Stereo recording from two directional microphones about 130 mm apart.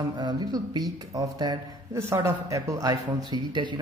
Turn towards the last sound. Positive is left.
turn(degrees=-35)  # may be behind; listen again after turning